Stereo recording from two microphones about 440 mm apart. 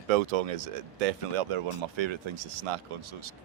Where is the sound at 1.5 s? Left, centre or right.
Right.